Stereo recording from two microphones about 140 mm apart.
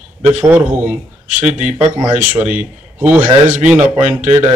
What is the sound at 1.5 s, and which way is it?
Speech, 60° right (ahead or behind).